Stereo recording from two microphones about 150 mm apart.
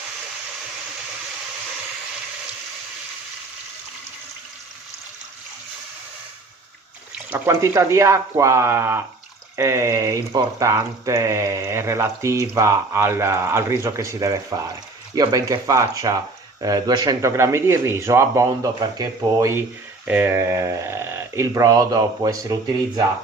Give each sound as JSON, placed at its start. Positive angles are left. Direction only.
{"t": 7.3, "sound": "speech", "side_deg": -15}